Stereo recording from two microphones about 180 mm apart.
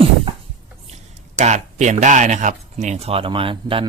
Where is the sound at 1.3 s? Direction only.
40° right (ahead or behind).